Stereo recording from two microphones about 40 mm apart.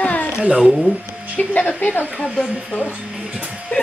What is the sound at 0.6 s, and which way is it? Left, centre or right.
Speech, centre.